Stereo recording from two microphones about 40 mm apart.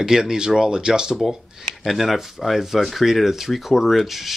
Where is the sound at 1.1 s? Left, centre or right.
Centre.